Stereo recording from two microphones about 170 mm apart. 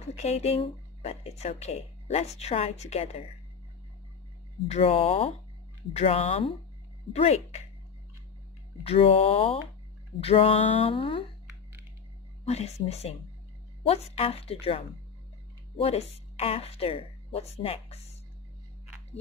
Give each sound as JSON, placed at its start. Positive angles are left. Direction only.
{"t": 0.1, "sound": "speech", "side_deg": 40}
{"t": 4.6, "sound": "a woman's voice", "side_deg": 35}
{"t": 8.8, "sound": "a woman's voice", "side_deg": 35}
{"t": 12.4, "sound": "a woman's voice", "side_deg": 40}